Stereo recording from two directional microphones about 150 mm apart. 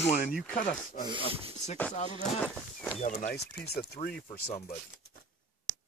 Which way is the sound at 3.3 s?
90° left.